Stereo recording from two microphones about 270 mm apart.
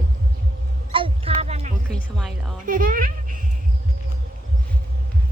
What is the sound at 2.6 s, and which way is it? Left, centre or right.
Speech, right.